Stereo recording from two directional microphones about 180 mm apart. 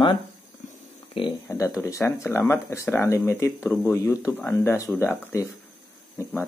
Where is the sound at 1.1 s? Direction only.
30° left (ahead or behind).